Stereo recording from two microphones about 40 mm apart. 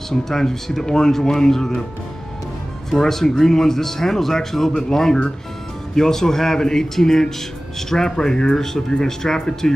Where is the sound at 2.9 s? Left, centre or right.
Centre.